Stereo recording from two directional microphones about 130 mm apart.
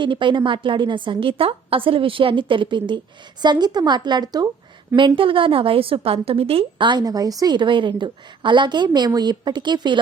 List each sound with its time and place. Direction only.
0.0 s a woman's voice: 40° right (ahead or behind)